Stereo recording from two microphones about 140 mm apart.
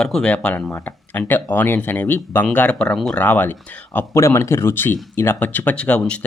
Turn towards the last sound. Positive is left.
turn(degrees=10)  # may be behind; listen again after turning